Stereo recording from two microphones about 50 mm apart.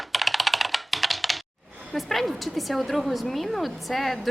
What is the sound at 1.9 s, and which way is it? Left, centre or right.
A woman's voice, centre.